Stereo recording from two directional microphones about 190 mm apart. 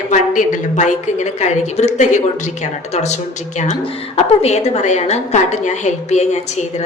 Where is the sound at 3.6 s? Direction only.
35° left (ahead or behind).